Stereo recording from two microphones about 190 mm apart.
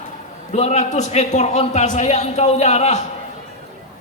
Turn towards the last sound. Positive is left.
turn(degrees=35)  # may be behind; listen again after turning